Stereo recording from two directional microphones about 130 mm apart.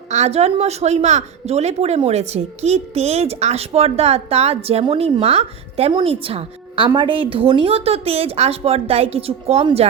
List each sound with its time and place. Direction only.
0.1 s a woman's voice: 55° right (ahead or behind)